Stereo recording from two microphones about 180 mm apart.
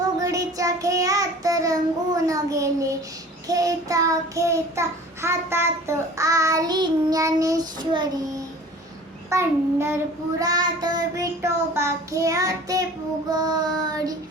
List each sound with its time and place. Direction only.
0.2 s child singing: 20° right (ahead or behind)